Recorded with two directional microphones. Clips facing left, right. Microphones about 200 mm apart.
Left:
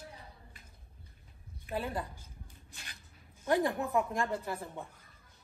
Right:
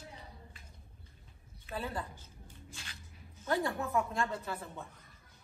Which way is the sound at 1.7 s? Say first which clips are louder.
Left 3 dB; 15° left (ahead or behind).